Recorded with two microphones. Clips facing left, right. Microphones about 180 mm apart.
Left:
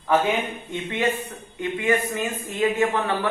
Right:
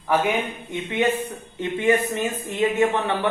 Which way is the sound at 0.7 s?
15° right (ahead or behind).